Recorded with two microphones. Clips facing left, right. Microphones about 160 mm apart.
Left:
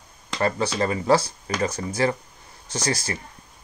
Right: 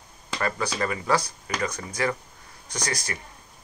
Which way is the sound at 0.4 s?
30° left (ahead or behind).